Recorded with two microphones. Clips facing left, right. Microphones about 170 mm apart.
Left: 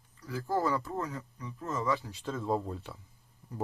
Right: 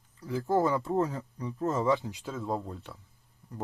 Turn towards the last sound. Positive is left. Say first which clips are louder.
# left 1 dB
turn(degrees=5)  # may be behind; listen again after turning